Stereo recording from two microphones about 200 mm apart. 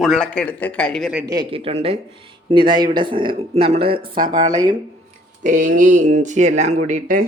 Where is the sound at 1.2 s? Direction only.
20° right (ahead or behind).